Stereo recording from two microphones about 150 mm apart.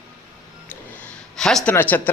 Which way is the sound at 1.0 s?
5° left (ahead or behind).